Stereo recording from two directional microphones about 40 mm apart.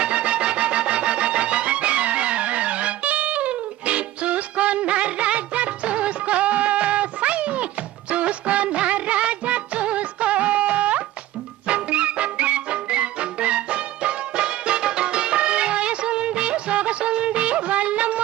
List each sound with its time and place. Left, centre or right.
0.0 s music: right